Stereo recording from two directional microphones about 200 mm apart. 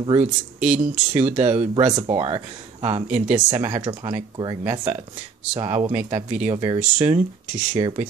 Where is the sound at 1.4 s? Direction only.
35° right (ahead or behind).